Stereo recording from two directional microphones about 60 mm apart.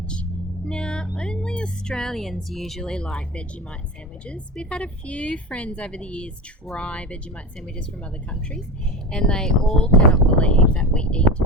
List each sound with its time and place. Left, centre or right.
0.0 s music: centre
1.1 s a woman's voice: centre
8.3 s a woman's voice: centre